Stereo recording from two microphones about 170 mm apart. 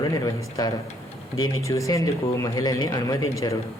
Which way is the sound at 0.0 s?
20° left (ahead or behind).